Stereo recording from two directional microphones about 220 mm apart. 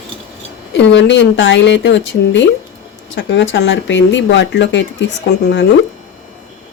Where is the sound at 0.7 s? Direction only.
55° left (ahead or behind).